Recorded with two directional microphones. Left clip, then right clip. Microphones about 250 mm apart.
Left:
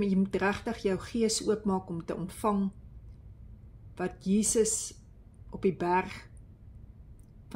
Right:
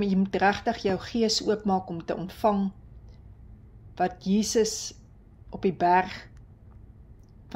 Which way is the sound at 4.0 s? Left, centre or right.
Left.